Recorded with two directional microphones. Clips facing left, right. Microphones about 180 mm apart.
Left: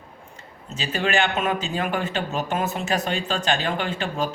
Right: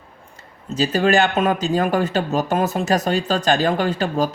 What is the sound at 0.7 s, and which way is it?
Speech, 40° right (ahead or behind).